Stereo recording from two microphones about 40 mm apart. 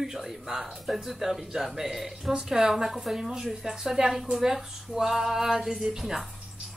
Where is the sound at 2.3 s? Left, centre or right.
Centre.